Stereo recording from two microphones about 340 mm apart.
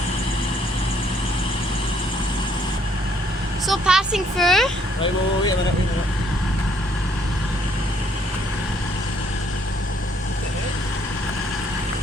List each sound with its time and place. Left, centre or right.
3.7 s speech: centre